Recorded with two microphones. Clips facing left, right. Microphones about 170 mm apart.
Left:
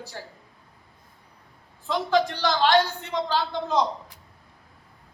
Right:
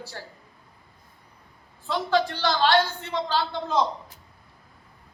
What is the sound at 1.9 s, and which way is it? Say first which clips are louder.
A man's voice: left 1 dB; 15° left (ahead or behind).